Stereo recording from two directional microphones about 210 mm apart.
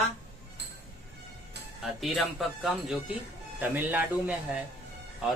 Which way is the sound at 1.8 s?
Centre (ahead or behind).